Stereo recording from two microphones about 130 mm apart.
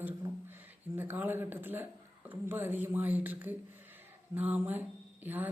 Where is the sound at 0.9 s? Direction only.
15° right (ahead or behind).